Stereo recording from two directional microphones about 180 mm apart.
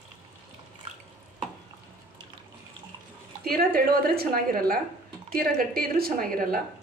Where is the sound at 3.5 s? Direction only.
55° right (ahead or behind).